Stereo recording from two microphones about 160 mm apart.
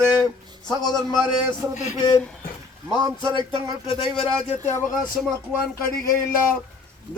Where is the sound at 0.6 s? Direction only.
Centre (ahead or behind).